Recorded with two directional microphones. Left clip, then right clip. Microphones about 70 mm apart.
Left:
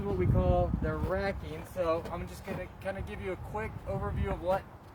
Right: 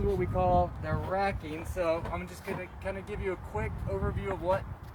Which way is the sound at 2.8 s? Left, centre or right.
Left.